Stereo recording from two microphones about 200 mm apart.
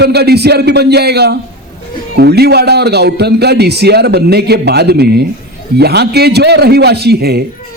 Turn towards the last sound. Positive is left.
turn(degrees=-55)  # may be behind; listen again after turning